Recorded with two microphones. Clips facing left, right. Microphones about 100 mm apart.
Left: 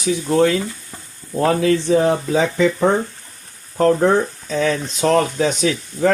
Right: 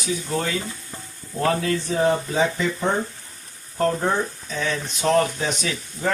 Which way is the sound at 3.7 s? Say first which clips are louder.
Left 7 dB; 90° left.